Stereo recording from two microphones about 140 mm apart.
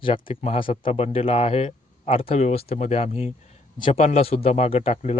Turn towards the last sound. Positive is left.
turn(degrees=50)  # may be behind; listen again after turning